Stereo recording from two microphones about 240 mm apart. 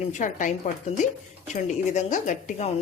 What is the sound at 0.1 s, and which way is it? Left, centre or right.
Speech, left.